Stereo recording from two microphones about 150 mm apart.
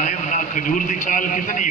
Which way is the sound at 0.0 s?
55° left (ahead or behind).